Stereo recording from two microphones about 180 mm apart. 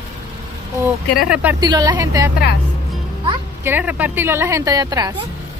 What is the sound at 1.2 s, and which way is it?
Speech, 5° right (ahead or behind).